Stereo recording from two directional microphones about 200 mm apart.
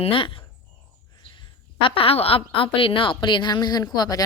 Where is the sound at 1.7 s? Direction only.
25° left (ahead or behind).